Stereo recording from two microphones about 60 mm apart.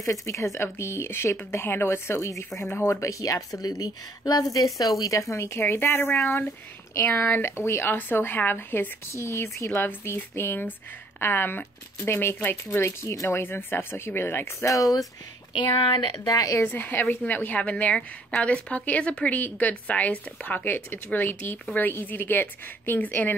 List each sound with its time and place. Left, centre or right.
0.0 s speech: left
7.2 s speech: left
7.5 s speech: left
7.9 s speech: left
9.2 s speech: left
13.0 s speech: left
13.4 s speech: left
14.7 s speech: left
16.3 s speech: left
16.6 s speech: left